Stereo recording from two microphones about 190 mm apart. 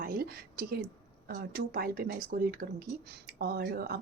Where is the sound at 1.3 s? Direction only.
55° right (ahead or behind).